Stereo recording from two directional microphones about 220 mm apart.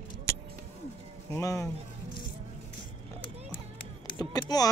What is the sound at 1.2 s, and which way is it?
Speech, 15° left (ahead or behind).